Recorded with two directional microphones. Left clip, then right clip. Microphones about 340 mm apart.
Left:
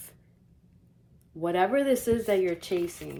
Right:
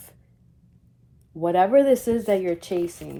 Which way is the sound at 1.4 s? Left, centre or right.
Centre.